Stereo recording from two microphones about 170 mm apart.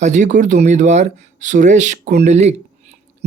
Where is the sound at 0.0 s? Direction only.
45° right (ahead or behind).